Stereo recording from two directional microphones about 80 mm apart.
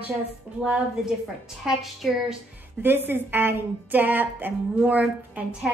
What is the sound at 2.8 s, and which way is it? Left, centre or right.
A woman's voice, right.